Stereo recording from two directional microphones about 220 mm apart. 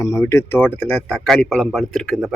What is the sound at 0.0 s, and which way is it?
Speech, 15° left (ahead or behind).